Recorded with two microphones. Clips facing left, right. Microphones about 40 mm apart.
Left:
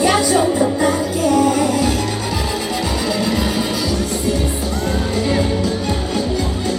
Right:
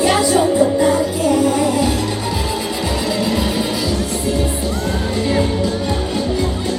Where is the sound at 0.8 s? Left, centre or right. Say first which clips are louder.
Right 1 dB; centre.